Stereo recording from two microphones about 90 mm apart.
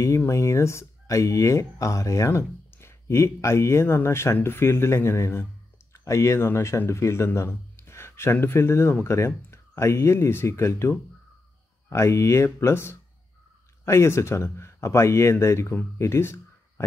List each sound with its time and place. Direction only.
0.3 s speech: 35° left (ahead or behind)